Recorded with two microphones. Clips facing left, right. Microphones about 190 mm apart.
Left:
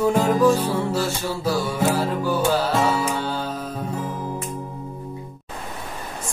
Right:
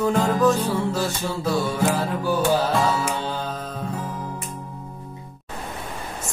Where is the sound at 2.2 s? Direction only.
15° right (ahead or behind).